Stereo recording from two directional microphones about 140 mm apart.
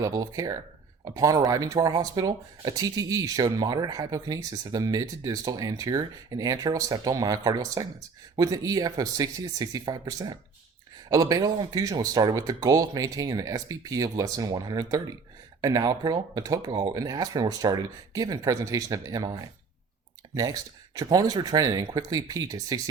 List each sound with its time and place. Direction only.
0.0 s speech: 25° right (ahead or behind)
20.3 s speech: 25° right (ahead or behind)